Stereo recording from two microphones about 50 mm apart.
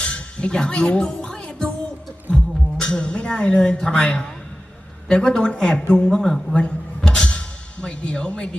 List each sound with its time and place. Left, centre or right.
0.0 s music: centre
5.0 s speech: centre
6.1 s speech: centre
6.6 s music: centre